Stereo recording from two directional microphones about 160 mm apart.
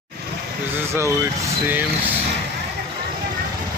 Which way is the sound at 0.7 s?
15° right (ahead or behind).